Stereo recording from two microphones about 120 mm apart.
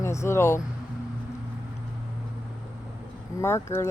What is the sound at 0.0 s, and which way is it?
Speech, 25° left (ahead or behind).